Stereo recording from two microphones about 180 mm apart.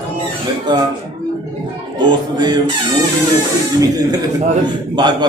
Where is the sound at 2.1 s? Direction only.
25° right (ahead or behind).